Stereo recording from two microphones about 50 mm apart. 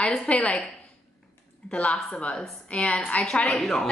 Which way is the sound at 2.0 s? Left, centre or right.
Centre.